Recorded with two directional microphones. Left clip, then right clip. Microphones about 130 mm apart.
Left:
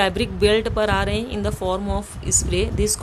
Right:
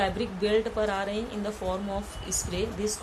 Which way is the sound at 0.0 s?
90° left.